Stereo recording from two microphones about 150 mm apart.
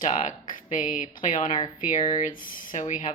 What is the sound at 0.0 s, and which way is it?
A woman's voice, 55° left (ahead or behind).